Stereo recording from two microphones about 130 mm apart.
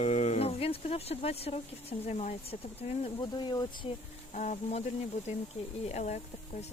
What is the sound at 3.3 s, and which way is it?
Speech, 35° left (ahead or behind).